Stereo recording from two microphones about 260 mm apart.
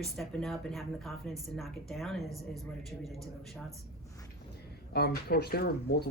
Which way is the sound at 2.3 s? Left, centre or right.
Centre.